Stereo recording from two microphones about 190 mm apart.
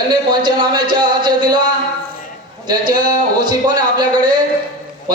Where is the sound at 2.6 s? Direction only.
20° right (ahead or behind).